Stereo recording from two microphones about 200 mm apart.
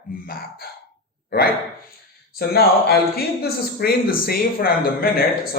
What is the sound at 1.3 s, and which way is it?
Speech, 50° left (ahead or behind).